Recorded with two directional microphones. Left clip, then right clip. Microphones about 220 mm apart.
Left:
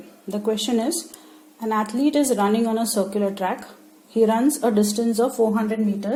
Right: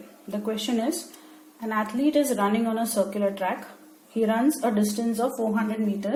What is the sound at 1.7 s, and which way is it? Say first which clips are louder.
A woman's voice: left 3 dB; 45° left (ahead or behind).